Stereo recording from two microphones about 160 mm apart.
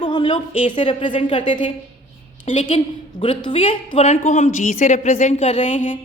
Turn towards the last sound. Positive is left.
turn(degrees=50)  # may be behind; listen again after turning